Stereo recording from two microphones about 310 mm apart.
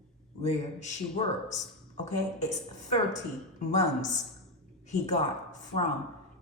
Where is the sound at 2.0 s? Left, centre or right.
Left.